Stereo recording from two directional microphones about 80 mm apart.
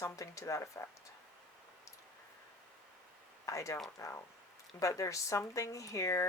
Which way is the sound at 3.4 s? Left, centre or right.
Left.